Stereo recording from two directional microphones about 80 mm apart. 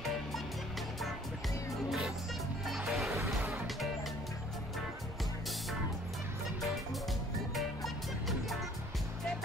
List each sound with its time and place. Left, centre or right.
1.9 s music: centre
3.3 s music: centre
7.5 s music: centre